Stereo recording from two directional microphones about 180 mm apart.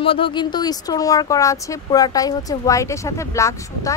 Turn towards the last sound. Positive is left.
turn(degrees=15)  # may be behind; listen again after turning